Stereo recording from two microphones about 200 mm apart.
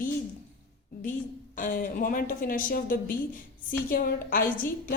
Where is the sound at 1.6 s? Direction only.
40° left (ahead or behind).